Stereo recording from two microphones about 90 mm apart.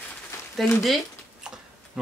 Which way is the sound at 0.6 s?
Centre (ahead or behind).